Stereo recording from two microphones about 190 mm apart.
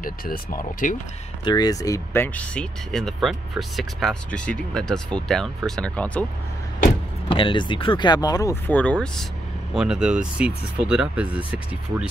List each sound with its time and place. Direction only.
0.0 s speech: 50° left (ahead or behind)
1.4 s speech: 20° left (ahead or behind)
7.2 s speech: 25° left (ahead or behind); by 12.1 s 5° right (ahead or behind)